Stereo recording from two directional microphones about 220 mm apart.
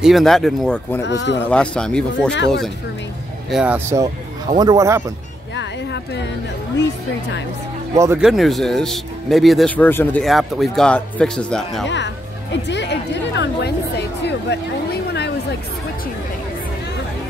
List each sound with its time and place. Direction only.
0.0 s speech: centre (ahead or behind)
1.0 s speech: 55° left (ahead or behind)
1.5 s speech: 5° left (ahead or behind)
3.4 s speech: 5° right (ahead or behind)
5.6 s a sound: 50° left (ahead or behind)
7.9 s speech: 10° right (ahead or behind)
8.3 s speech: centre (ahead or behind)
12.6 s speech: 50° left (ahead or behind)